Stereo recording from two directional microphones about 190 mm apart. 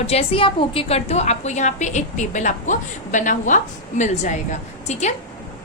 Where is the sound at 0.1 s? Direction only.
30° left (ahead or behind).